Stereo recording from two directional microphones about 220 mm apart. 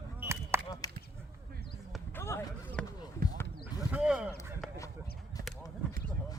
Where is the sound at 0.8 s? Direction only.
15° left (ahead or behind).